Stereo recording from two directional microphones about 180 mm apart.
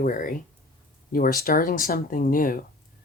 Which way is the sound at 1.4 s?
50° left (ahead or behind).